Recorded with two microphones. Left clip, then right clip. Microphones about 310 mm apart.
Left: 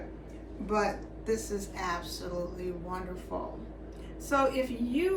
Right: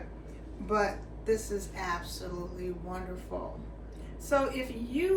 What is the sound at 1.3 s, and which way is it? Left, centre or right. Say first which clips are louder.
A woman's voice: right 2 dB; centre.